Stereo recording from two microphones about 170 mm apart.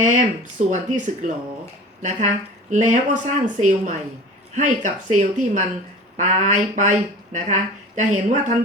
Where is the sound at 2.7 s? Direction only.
45° right (ahead or behind).